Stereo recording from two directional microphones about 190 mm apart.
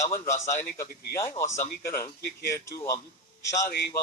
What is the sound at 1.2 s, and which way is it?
Speech, 15° left (ahead or behind).